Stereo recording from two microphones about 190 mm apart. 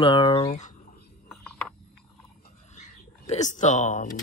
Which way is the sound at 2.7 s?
40° left (ahead or behind).